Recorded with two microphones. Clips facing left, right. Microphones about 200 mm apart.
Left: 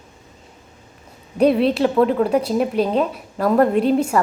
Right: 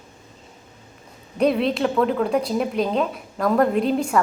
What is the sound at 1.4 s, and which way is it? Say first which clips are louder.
A woman's voice: left 4 dB; centre (ahead or behind).